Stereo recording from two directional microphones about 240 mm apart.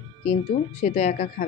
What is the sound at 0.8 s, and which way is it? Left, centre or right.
Speech, left.